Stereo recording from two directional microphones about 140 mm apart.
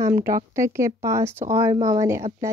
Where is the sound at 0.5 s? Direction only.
20° right (ahead or behind).